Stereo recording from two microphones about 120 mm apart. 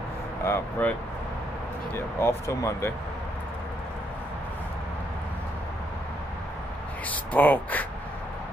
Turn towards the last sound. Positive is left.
turn(degrees=15)  # may be behind; listen again after turning